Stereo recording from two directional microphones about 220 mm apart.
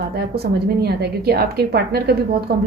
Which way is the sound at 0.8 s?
45° right (ahead or behind).